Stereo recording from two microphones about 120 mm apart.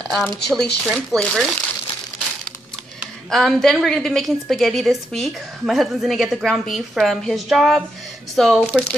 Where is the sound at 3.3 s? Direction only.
5° left (ahead or behind).